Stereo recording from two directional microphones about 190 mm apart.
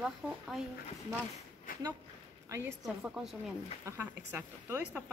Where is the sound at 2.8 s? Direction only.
Centre (ahead or behind).